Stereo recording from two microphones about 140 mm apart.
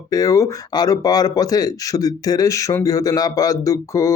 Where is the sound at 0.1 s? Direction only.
25° left (ahead or behind).